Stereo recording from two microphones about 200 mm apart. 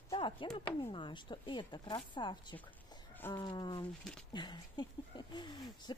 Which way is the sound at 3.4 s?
20° left (ahead or behind).